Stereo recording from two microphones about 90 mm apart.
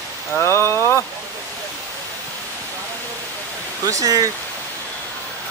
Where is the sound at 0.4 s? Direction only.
30° left (ahead or behind).